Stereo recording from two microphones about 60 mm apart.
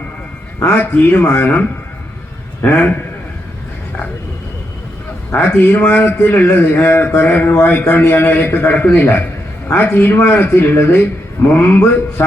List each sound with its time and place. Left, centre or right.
0.6 s a man's voice: left
5.3 s a man's voice: left